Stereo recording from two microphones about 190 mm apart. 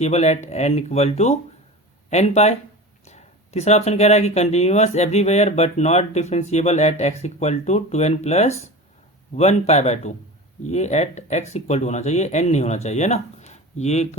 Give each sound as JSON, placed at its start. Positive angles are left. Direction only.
{"t": 0.0, "sound": "speech", "side_deg": 35}